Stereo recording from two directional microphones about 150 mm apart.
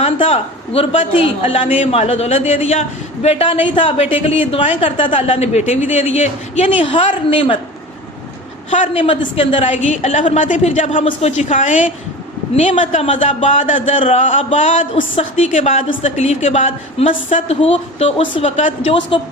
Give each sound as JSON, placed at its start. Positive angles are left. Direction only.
{"t": 0.0, "sound": "a woman's voice", "side_deg": 40}
{"t": 8.7, "sound": "a woman's voice", "side_deg": 50}
{"t": 9.0, "sound": "a woman's voice", "side_deg": 35}